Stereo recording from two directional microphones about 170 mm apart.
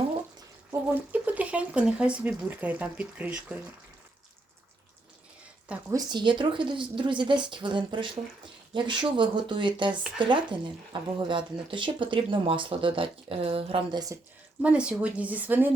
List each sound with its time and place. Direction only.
0.7 s speech: 10° right (ahead or behind)
5.9 s speech: 25° right (ahead or behind)
14.6 s speech: 5° right (ahead or behind)